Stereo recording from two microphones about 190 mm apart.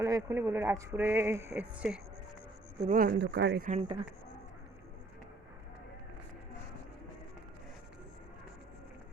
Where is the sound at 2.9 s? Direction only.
50° right (ahead or behind); by 3.6 s 65° right (ahead or behind).